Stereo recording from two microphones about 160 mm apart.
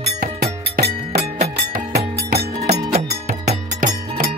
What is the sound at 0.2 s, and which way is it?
Music, 80° right.